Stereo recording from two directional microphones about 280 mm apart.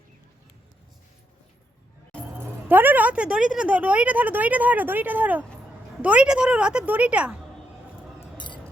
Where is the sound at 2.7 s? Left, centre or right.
Centre.